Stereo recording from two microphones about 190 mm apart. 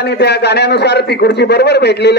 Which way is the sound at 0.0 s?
60° left (ahead or behind).